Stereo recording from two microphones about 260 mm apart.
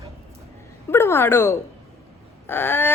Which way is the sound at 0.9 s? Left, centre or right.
Centre.